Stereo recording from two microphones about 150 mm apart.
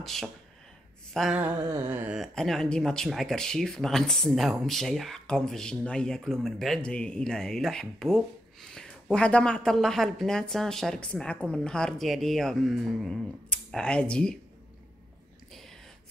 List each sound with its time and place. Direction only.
0.0 s speech: centre (ahead or behind)
1.1 s a sound: centre (ahead or behind)
1.4 s speech: 15° right (ahead or behind); by 14.4 s 5° left (ahead or behind)